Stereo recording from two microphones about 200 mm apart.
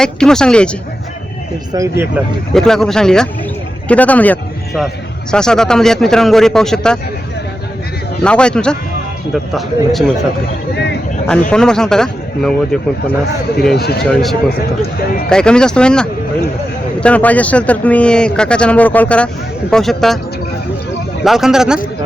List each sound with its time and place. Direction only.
0.0 s speech: 5° left (ahead or behind)
1.7 s speech: 15° right (ahead or behind)
2.5 s a man's voice: centre (ahead or behind)
8.2 s speech: 5° left (ahead or behind)
11.5 s speech: 5° left (ahead or behind)
13.7 s speech: 55° left (ahead or behind)
14.0 s speech: centre (ahead or behind)
21.2 s speech: centre (ahead or behind)